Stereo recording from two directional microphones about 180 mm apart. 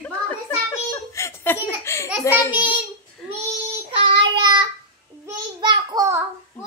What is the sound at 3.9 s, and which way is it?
Child singing, 30° right (ahead or behind).